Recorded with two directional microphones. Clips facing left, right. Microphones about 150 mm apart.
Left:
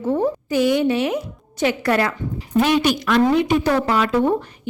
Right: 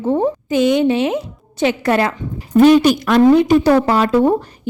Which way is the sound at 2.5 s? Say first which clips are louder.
Right 8 dB; 45° right (ahead or behind).